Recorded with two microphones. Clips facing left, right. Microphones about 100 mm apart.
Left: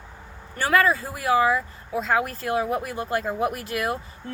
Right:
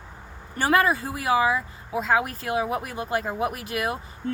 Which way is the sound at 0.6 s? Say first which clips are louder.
Even; 20° right (ahead or behind).